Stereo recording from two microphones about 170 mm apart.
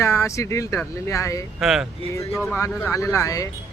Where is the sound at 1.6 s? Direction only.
Centre (ahead or behind).